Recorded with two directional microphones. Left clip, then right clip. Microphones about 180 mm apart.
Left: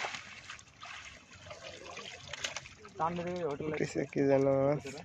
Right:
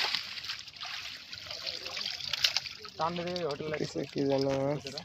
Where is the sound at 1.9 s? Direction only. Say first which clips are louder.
Right 9 dB; centre (ahead or behind).